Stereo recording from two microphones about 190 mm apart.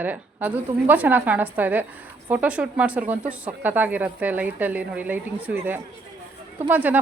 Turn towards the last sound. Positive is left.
turn(degrees=-10)  # may be behind; listen again after turning